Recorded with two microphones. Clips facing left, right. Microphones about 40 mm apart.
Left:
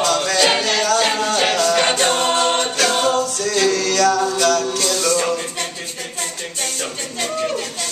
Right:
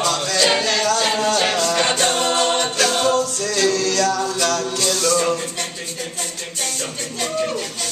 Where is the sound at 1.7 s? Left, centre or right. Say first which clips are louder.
Left 2 dB; centre.